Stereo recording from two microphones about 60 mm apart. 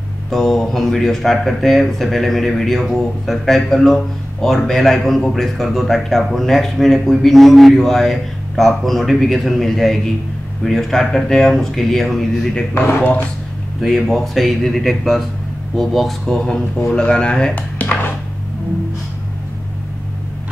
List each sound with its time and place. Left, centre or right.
0.3 s speech: centre
13.7 s speech: centre
16.4 s speech: centre
17.6 s dishes: left